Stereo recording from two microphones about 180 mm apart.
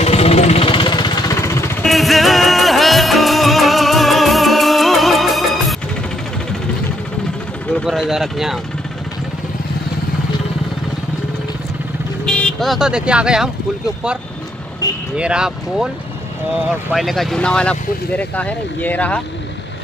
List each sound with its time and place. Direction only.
0.0 s music: 35° left (ahead or behind)
1.8 s music: centre (ahead or behind)
7.7 s speech: centre (ahead or behind)
12.3 s speech: 5° left (ahead or behind)
15.1 s speech: 5° right (ahead or behind)
16.9 s speech: centre (ahead or behind)